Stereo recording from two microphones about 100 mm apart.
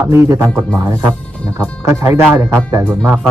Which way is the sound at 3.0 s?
15° right (ahead or behind).